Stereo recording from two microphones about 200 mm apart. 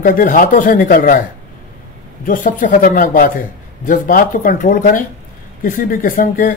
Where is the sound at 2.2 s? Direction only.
40° left (ahead or behind).